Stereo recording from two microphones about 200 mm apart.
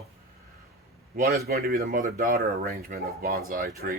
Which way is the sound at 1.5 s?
50° right (ahead or behind).